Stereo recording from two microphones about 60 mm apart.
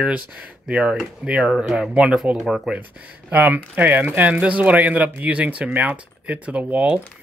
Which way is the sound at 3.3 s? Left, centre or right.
Right.